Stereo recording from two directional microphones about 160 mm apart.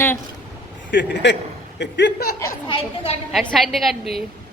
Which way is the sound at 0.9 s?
90° left.